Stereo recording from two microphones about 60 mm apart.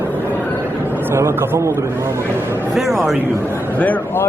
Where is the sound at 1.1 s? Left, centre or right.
Right.